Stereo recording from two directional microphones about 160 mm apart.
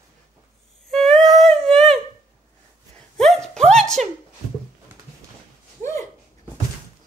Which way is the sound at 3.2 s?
5° left (ahead or behind).